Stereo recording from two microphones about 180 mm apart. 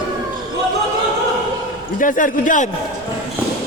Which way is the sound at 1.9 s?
50° left (ahead or behind).